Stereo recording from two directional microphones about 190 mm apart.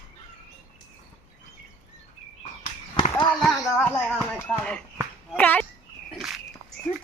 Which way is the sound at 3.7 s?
10° left (ahead or behind).